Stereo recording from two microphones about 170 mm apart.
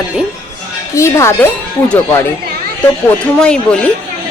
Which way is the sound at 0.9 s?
15° left (ahead or behind).